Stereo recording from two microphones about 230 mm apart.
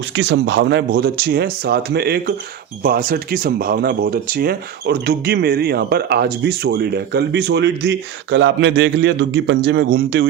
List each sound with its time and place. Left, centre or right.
0.2 s speech: right